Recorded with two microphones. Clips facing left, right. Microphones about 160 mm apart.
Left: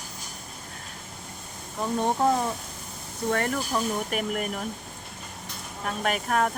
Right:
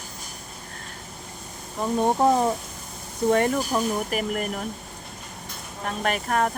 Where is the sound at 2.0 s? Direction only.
20° right (ahead or behind).